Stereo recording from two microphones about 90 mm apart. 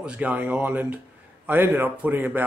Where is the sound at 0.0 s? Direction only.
15° right (ahead or behind).